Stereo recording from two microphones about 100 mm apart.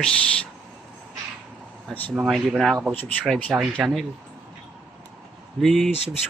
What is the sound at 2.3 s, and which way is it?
Speech, centre (ahead or behind).